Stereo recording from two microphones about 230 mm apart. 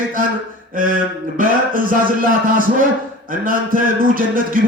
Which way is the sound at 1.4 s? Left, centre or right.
Right.